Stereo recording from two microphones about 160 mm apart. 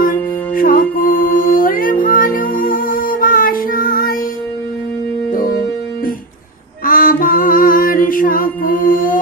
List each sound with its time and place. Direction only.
0.0 s music: 60° left (ahead or behind)
5.3 s music: 60° left (ahead or behind)
6.9 s music: 65° left (ahead or behind)